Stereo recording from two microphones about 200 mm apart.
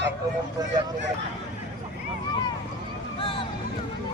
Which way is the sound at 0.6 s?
20° right (ahead or behind).